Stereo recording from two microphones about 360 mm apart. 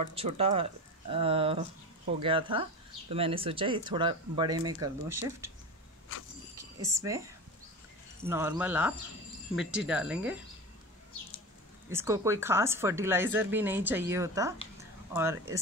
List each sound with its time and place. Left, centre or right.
0.1 s a woman's voice: centre
6.5 s a woman's voice: centre
8.3 s speech: centre
11.9 s a woman's voice: centre